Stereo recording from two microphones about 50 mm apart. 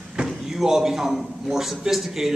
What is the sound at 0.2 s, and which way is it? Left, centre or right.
A man's voice, centre.